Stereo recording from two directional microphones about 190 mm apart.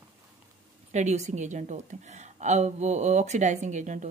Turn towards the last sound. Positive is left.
turn(degrees=-40)  # may be behind; listen again after turning